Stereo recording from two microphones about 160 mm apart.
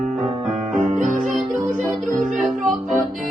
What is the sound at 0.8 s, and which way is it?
Music, 50° right (ahead or behind).